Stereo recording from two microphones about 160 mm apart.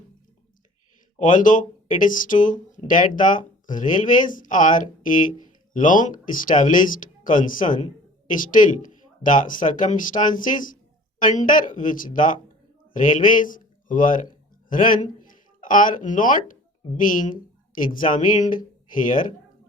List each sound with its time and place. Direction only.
1.2 s speech: 55° left (ahead or behind)